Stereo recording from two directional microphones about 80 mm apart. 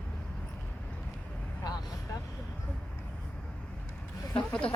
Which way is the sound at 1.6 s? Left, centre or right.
Left.